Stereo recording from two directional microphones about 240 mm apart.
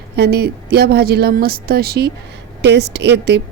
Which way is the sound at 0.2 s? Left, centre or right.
Right.